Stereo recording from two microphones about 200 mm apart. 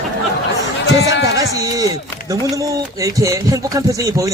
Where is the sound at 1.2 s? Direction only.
15° right (ahead or behind).